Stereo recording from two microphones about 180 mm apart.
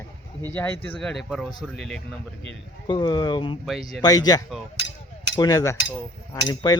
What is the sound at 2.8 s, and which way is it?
Speech, 25° left (ahead or behind).